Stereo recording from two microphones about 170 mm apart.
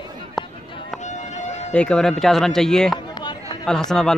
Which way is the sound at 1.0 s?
45° left (ahead or behind).